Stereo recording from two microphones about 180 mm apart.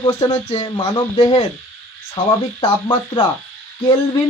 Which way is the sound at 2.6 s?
25° left (ahead or behind).